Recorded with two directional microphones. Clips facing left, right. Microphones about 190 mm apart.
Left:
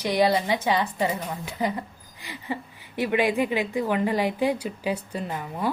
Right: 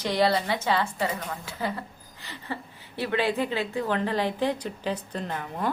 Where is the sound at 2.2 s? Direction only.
15° left (ahead or behind).